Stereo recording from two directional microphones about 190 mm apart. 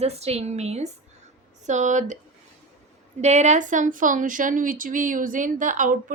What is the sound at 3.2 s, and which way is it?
A woman's voice, 35° right (ahead or behind).